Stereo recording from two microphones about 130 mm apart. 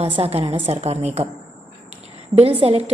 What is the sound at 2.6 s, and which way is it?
Speech, 45° right (ahead or behind).